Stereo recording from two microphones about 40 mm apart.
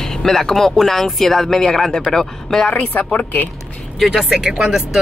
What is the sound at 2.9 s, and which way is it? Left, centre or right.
Speech, left.